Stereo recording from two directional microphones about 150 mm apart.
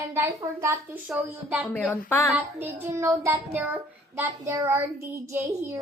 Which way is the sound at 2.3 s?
10° right (ahead or behind).